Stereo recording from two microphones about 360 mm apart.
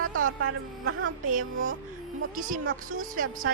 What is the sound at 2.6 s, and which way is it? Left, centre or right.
Speech, right.